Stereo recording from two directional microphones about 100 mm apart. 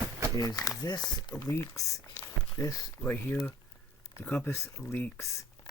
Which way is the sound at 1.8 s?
30° left (ahead or behind).